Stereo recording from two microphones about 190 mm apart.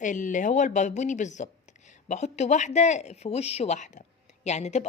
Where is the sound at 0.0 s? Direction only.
40° left (ahead or behind).